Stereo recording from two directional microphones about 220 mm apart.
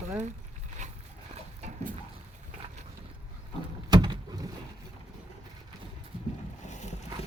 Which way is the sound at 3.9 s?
20° right (ahead or behind).